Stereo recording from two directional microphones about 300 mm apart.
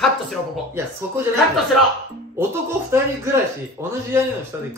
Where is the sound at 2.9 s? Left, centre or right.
Centre.